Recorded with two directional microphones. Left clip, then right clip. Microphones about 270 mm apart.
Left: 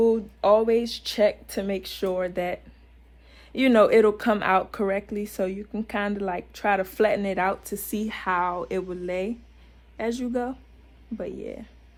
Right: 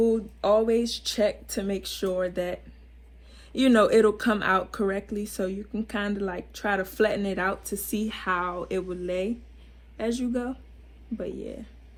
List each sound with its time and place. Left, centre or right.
0.0 s speech: left